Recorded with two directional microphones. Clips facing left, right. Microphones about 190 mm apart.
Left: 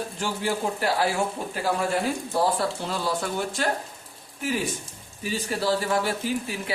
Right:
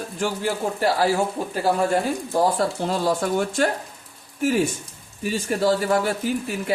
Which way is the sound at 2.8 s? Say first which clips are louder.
Right 6 dB; 45° right (ahead or behind).